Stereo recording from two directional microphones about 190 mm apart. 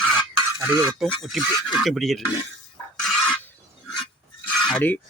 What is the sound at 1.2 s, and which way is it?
Speech, centre (ahead or behind).